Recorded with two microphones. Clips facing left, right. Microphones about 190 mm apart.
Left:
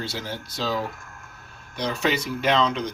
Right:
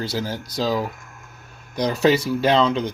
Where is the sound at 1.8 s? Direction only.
40° right (ahead or behind).